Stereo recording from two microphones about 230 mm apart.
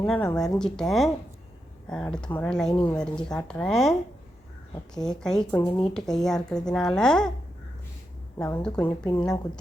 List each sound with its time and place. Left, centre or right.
0.0 s speech: centre
2.7 s a woman's voice: left
3.2 s speech: centre
4.9 s speech: centre
8.4 s a woman's voice: centre